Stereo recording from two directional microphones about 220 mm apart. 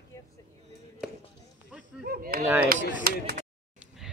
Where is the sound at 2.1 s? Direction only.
40° right (ahead or behind).